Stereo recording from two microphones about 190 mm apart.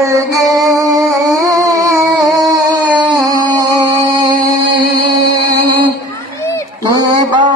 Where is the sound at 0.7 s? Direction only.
20° right (ahead or behind).